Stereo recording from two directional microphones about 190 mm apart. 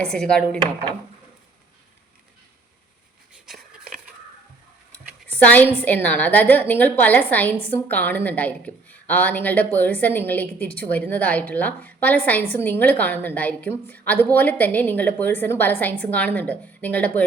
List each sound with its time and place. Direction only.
0.0 s speech: 5° left (ahead or behind)
3.4 s a sound: centre (ahead or behind)
5.3 s a woman's voice: 10° left (ahead or behind)